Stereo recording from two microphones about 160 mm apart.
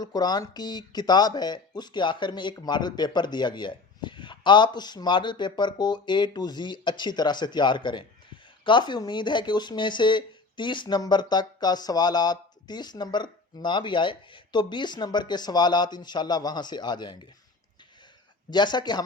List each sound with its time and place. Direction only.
0.0 s speech: 25° left (ahead or behind)
18.5 s speech: 30° left (ahead or behind)